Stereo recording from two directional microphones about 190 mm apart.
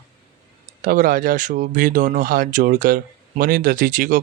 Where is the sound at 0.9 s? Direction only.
50° right (ahead or behind).